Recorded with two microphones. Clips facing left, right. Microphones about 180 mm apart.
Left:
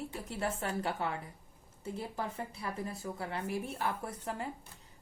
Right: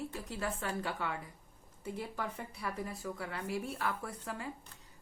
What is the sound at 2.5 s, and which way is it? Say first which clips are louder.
A woman's voice: left 1 dB; 25° left (ahead or behind).